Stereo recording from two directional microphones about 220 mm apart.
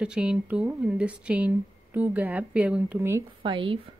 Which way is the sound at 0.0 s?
5° right (ahead or behind).